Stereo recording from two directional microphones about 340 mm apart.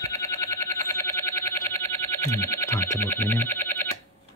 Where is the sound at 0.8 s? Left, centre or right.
Centre.